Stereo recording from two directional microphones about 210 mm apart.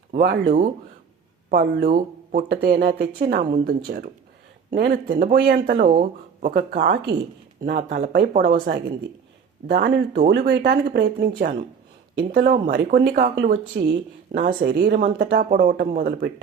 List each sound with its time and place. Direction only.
0.1 s speech: 45° right (ahead or behind)
1.5 s speech: 40° right (ahead or behind)
14.7 s speech: 55° right (ahead or behind)
15.0 s speech: 40° right (ahead or behind)